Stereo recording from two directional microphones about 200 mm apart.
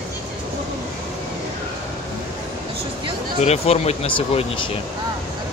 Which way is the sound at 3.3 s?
30° left (ahead or behind).